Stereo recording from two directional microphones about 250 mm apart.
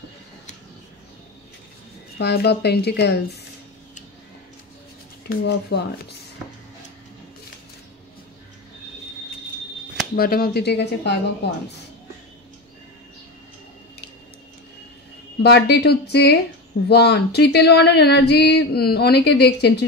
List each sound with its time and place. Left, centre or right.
2.1 s speech: left
5.4 s speech: left
10.1 s speech: left
15.4 s speech: left